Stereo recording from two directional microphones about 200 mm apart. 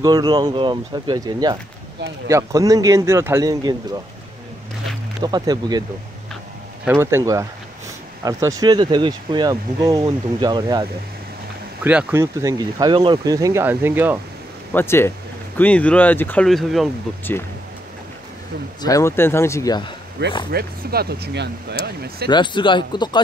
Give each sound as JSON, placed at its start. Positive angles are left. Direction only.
{"t": 0.0, "sound": "speech", "side_deg": -20}
{"t": 5.2, "sound": "speech", "side_deg": -20}
{"t": 6.9, "sound": "speech", "side_deg": -10}
{"t": 11.8, "sound": "speech", "side_deg": -10}
{"t": 14.7, "sound": "speech", "side_deg": 10}
{"t": 18.8, "sound": "speech", "side_deg": 15}
{"t": 20.2, "sound": "speech", "side_deg": -55}
{"t": 22.3, "sound": "speech", "side_deg": 25}